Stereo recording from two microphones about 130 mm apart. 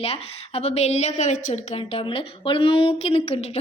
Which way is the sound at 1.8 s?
45° left (ahead or behind).